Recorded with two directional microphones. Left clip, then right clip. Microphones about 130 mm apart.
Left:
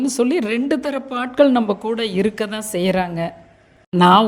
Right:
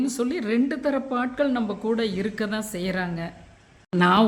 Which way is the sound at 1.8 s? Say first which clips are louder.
Left 5 dB; 40° left (ahead or behind).